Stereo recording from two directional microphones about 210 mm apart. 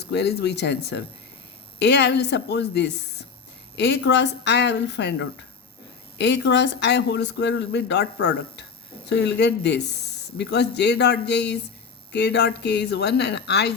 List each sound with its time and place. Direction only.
0.0 s speech: 50° left (ahead or behind)